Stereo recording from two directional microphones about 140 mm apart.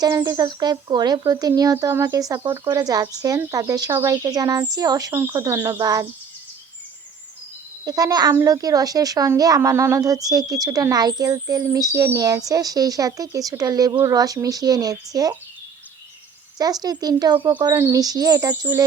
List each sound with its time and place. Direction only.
0.0 s speech: 30° right (ahead or behind)
7.9 s speech: 25° right (ahead or behind)
16.6 s speech: 25° right (ahead or behind)
17.7 s speech: 20° right (ahead or behind)